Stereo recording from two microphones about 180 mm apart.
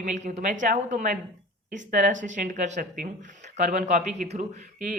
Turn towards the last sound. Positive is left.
turn(degrees=-45)  # may be behind; listen again after turning